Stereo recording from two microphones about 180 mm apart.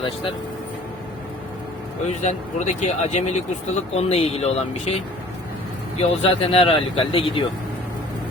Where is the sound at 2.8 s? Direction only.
40° left (ahead or behind).